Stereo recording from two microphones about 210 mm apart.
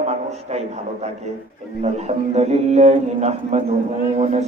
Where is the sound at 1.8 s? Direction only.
30° right (ahead or behind).